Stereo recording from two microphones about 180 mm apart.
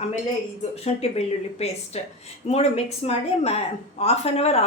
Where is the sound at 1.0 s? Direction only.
35° left (ahead or behind).